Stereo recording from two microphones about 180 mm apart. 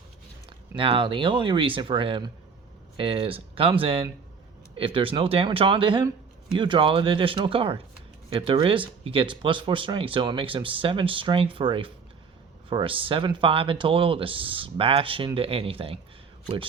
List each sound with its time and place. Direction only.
0.8 s speech: 30° right (ahead or behind)